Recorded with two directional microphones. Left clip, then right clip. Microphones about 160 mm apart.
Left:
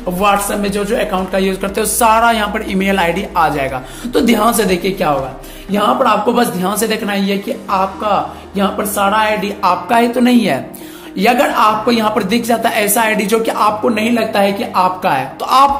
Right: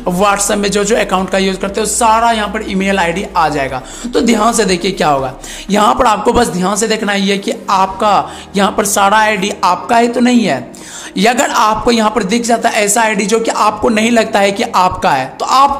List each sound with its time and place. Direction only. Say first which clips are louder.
0.0 s speech: right 1 dB; 35° right (ahead or behind)
1.6 s a woman's voice: right 1 dB; 5° right (ahead or behind); by 5.1 s 30° right (ahead or behind)
5.7 s speech: right 3 dB; 45° right (ahead or behind)
6.6 s a woman's voice: right 3 dB; 15° right (ahead or behind)
7.2 s speech: right 3 dB; 35° right (ahead or behind)
9.8 s a woman's voice: right 2 dB; 15° right (ahead or behind)
11.1 s speech: right 1 dB; 35° right (ahead or behind)
12.0 s a woman's voice: right 2 dB; 20° right (ahead or behind)
13.8 s speech: right 3 dB; 30° right (ahead or behind)